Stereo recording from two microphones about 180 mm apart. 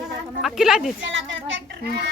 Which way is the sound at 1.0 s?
90° right.